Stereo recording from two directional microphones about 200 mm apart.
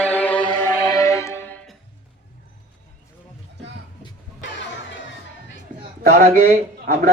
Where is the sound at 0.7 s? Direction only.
15° left (ahead or behind).